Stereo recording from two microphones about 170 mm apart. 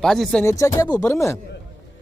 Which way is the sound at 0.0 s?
Centre (ahead or behind).